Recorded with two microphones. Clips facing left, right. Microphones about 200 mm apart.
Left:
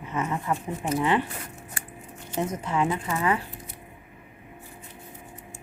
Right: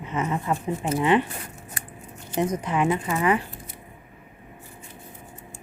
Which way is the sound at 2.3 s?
20° right (ahead or behind).